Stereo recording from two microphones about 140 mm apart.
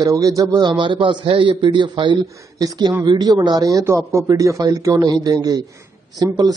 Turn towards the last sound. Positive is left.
turn(degrees=-30)  # may be behind; listen again after turning